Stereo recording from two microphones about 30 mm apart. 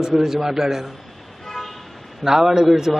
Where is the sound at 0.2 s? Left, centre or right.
Centre.